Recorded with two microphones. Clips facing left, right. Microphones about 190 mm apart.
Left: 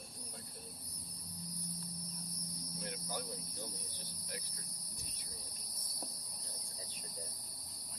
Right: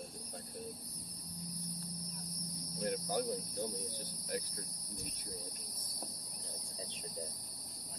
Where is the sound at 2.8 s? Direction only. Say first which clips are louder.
Right 10 dB; 45° right (ahead or behind).